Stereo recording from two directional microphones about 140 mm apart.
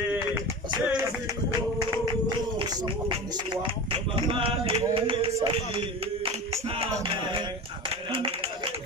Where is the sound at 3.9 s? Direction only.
40° right (ahead or behind).